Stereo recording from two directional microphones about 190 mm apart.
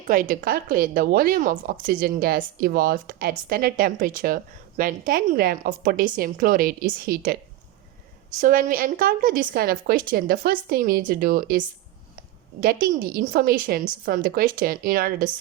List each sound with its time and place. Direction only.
0.1 s speech: 45° right (ahead or behind)
8.4 s speech: 45° right (ahead or behind)